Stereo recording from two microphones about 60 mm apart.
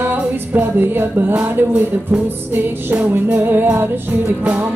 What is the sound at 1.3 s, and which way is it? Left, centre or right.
Music, right.